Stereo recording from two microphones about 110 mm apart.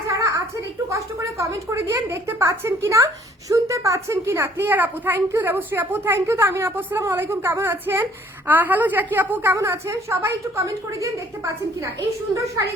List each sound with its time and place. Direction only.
0.1 s a sound: 25° right (ahead or behind)
0.9 s speech: 25° right (ahead or behind)
11.8 s speech: 30° right (ahead or behind)